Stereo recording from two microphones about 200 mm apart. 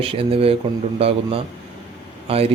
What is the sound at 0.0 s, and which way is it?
Speech, 30° right (ahead or behind).